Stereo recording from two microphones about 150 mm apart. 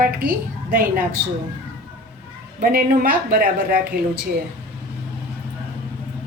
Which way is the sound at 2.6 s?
70° right (ahead or behind).